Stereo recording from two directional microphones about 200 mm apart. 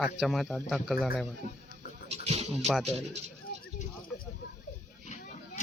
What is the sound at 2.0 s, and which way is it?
Music, 30° right (ahead or behind).